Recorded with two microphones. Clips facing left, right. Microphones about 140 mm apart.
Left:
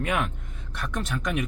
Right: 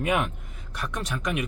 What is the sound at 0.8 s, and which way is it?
Speech, centre (ahead or behind).